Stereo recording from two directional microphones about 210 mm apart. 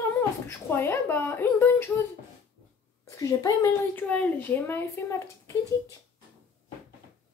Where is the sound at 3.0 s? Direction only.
15° left (ahead or behind).